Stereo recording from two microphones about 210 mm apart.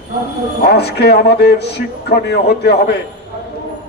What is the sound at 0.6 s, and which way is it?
A man's voice, 50° left (ahead or behind).